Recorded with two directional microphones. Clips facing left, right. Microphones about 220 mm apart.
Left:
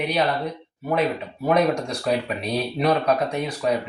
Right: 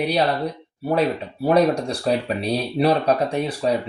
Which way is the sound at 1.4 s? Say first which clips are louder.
Right 3 dB; 35° right (ahead or behind).